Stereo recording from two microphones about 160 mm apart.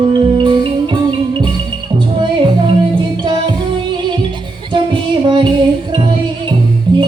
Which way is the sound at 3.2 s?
30° right (ahead or behind).